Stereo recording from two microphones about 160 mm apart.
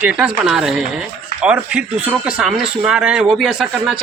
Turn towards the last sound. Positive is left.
turn(degrees=-5)  # may be behind; listen again after turning